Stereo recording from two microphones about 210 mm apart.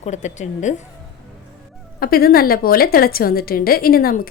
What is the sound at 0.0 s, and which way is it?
Speech, 35° left (ahead or behind).